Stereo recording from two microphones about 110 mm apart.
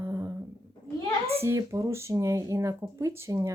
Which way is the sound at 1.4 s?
25° right (ahead or behind).